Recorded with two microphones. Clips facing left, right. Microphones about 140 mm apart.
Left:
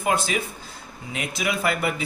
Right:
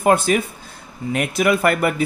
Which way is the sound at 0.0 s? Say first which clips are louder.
Right 8 dB; 55° right (ahead or behind).